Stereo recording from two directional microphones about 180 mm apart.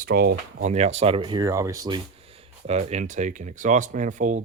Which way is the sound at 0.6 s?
35° right (ahead or behind).